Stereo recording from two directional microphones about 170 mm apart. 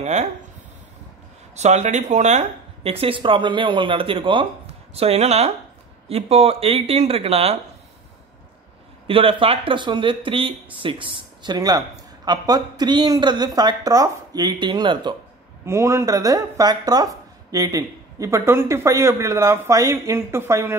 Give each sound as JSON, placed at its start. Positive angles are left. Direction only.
{"t": 0.0, "sound": "speech", "side_deg": -40}
{"t": 1.5, "sound": "speech", "side_deg": -40}
{"t": 9.0, "sound": "speech", "side_deg": -30}